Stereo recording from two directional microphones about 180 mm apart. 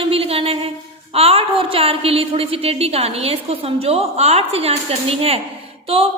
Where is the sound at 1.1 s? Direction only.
35° right (ahead or behind).